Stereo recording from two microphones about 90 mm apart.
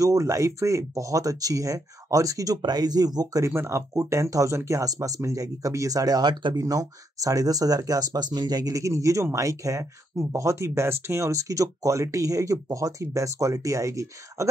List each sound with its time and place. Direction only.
0.0 s speech: 40° right (ahead or behind)
3.4 s speech: 30° right (ahead or behind)